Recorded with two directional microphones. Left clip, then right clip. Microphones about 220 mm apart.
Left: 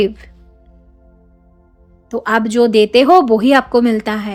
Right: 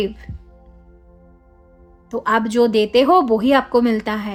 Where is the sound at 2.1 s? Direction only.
20° left (ahead or behind).